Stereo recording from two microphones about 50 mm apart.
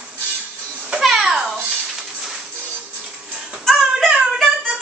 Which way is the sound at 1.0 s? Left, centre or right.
Centre.